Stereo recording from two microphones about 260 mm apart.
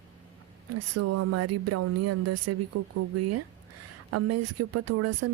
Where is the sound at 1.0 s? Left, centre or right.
Right.